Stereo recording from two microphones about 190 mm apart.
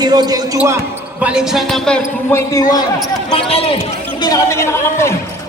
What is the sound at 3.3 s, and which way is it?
Speech, 30° left (ahead or behind).